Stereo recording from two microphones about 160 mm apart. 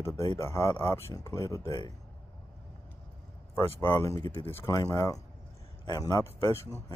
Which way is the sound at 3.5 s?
20° left (ahead or behind).